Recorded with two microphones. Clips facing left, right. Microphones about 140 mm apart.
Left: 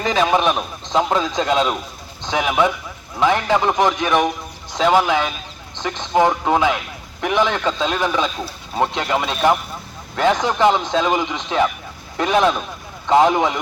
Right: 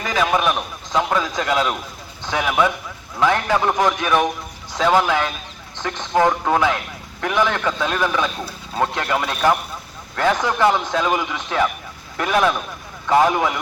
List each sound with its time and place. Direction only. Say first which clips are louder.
0.0 s a man's voice: left 2 dB; 25° left (ahead or behind)